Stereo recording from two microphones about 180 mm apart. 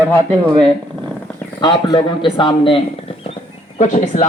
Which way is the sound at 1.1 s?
10° left (ahead or behind).